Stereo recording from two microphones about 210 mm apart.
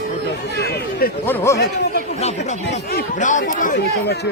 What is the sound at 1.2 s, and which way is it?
Speech, 10° left (ahead or behind).